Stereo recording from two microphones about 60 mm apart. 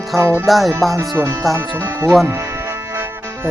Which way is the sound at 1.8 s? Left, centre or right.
Right.